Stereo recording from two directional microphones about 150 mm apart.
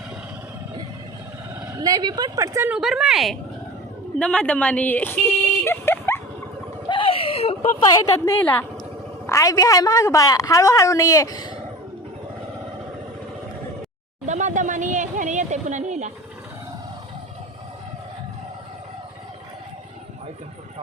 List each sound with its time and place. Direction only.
1.6 s speech: 25° right (ahead or behind)
2.7 s a woman's voice: 5° right (ahead or behind)
5.6 s dog: 15° left (ahead or behind)
6.8 s a sound: 35° left (ahead or behind); by 8.6 s 15° left (ahead or behind)
9.2 s a woman's voice: 20° left (ahead or behind)
14.3 s a sound: 55° right (ahead or behind)